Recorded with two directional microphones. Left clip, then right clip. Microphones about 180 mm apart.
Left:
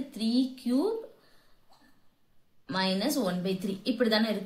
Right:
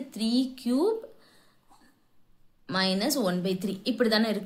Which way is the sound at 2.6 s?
40° right (ahead or behind).